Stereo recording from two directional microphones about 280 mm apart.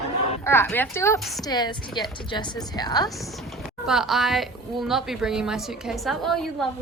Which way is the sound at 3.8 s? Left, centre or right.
Centre.